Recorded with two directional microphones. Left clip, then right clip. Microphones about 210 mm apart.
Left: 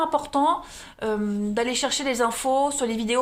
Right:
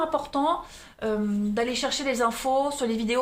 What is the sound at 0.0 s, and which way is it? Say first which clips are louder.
Speech: left 3 dB; 35° left (ahead or behind).